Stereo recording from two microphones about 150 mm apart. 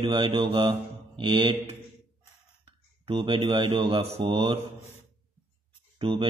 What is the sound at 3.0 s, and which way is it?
A man's voice, 35° right (ahead or behind).